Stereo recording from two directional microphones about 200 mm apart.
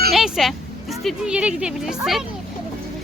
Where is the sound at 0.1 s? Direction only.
Centre (ahead or behind).